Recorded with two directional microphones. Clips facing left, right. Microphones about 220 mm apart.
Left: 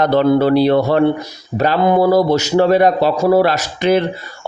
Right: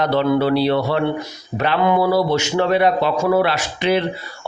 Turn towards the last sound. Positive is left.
turn(degrees=45)  # may be behind; listen again after turning